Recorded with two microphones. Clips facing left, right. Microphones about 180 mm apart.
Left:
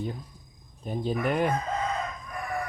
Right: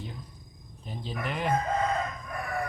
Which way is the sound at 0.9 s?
50° left (ahead or behind).